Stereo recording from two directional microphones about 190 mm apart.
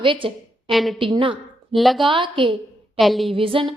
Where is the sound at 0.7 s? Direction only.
Centre (ahead or behind).